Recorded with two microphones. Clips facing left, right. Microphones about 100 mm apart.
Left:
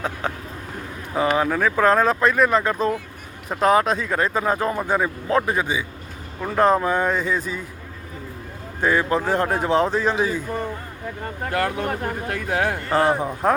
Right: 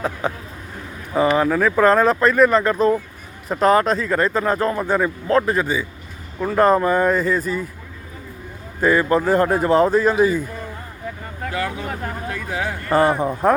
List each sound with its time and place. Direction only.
0.0 s speech: 5° right (ahead or behind)
8.8 s speech: centre (ahead or behind)
11.5 s speech: 60° left (ahead or behind)
12.9 s speech: 10° right (ahead or behind)